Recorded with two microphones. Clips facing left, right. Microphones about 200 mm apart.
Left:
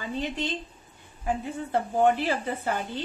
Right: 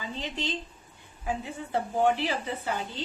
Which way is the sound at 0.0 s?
55° left (ahead or behind).